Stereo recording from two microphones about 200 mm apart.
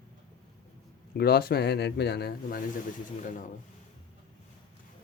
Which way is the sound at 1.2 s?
50° left (ahead or behind).